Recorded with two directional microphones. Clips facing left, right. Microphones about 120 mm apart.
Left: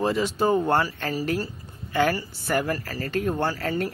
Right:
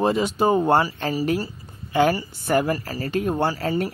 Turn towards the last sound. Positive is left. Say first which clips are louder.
# right 3 dB
turn(degrees=-15)  # may be behind; listen again after turning